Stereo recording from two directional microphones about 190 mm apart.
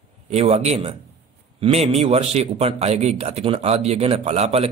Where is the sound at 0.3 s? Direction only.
35° right (ahead or behind).